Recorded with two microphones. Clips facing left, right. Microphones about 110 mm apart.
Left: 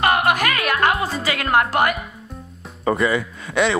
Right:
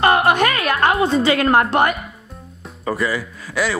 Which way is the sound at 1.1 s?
30° right (ahead or behind).